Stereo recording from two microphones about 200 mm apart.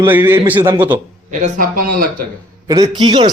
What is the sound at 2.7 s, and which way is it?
Speech, 20° right (ahead or behind).